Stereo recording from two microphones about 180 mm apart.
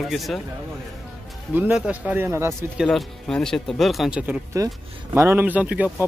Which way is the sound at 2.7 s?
Centre (ahead or behind).